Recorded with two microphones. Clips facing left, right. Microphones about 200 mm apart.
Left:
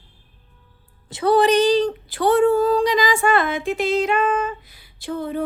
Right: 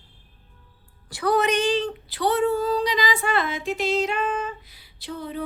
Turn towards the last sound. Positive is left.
turn(degrees=50)  # may be behind; listen again after turning